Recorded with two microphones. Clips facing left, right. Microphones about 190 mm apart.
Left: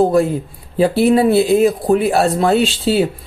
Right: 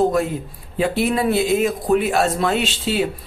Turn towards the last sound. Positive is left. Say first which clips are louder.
# left 6 dB
turn(degrees=35)  # may be behind; listen again after turning